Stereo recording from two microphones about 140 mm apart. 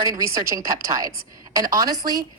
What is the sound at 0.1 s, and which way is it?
A woman's voice, 20° right (ahead or behind).